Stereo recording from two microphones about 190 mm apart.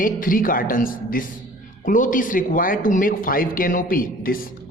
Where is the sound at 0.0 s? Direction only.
45° left (ahead or behind).